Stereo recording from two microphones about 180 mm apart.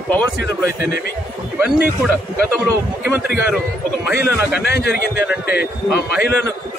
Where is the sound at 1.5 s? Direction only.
10° right (ahead or behind).